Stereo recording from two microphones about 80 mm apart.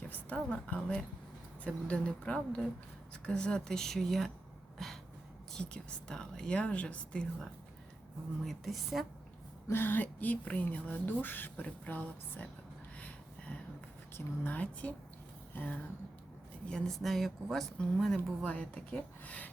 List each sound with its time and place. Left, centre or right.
0.1 s a woman's voice: centre
8.4 s speech: centre
9.6 s speech: left
13.0 s a sound: centre
14.4 s a woman's voice: centre
16.6 s speech: centre